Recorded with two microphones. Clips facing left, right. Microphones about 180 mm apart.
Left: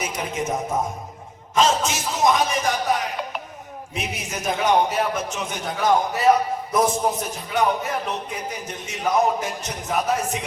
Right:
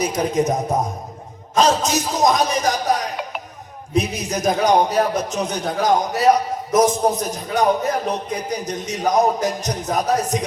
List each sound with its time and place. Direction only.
0.0 s a man's voice: 40° right (ahead or behind)